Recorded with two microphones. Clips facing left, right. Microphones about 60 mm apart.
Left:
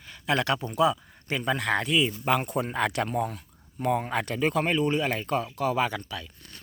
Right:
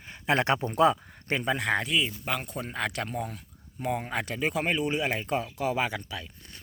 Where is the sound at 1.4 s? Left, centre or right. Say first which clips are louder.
Left 2 dB; centre.